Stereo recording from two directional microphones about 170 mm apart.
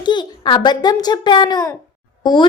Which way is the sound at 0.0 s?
25° left (ahead or behind).